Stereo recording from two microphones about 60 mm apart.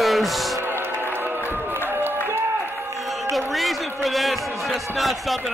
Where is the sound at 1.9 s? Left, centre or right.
Right.